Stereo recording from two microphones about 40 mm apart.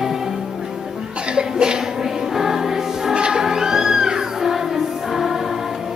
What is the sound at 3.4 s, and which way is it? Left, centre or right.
Music, centre.